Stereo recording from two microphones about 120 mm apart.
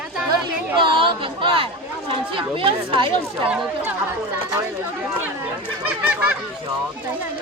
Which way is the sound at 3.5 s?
10° right (ahead or behind).